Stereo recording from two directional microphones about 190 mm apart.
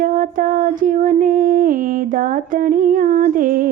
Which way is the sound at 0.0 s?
45° right (ahead or behind).